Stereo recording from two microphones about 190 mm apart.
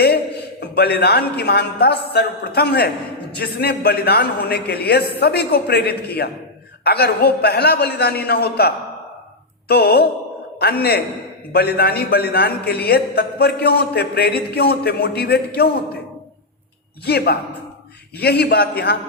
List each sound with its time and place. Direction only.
0.6 s a man's voice: 60° left (ahead or behind)
17.1 s a man's voice: 55° left (ahead or behind)